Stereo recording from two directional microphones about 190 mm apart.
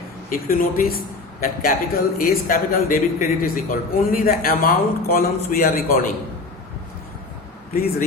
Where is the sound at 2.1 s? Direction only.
50° left (ahead or behind).